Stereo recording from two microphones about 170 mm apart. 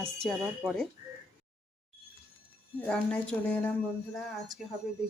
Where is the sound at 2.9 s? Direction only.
5° left (ahead or behind).